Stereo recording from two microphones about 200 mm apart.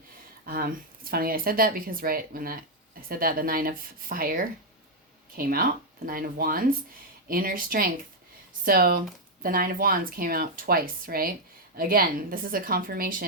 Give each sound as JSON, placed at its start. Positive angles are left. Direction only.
{"t": 0.4, "sound": "speech", "side_deg": -45}